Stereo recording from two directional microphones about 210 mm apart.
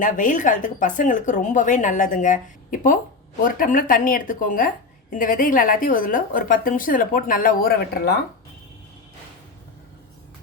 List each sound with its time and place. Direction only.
0.0 s speech: 35° left (ahead or behind)